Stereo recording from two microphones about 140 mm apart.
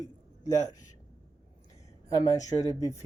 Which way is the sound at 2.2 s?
25° left (ahead or behind).